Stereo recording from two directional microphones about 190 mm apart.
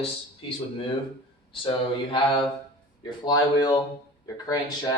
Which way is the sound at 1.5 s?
25° left (ahead or behind).